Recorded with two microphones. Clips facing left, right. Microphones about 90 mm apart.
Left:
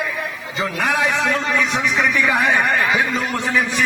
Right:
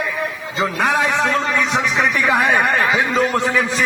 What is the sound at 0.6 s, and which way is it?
A man's voice, 30° right (ahead or behind).